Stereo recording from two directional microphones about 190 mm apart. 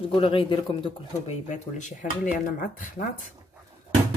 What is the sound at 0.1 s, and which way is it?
Speech, 30° left (ahead or behind).